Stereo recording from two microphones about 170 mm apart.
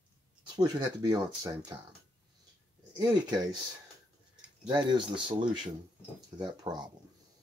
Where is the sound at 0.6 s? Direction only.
25° right (ahead or behind).